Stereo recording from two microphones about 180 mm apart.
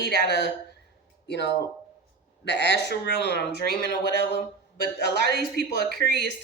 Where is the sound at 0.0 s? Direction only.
65° left (ahead or behind).